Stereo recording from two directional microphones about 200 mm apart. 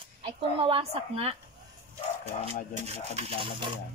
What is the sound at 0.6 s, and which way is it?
Speech, 30° right (ahead or behind).